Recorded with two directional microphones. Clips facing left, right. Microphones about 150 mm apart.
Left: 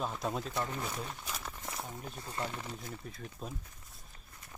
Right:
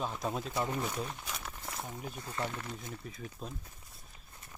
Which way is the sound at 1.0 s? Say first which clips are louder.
Right 1 dB; centre (ahead or behind).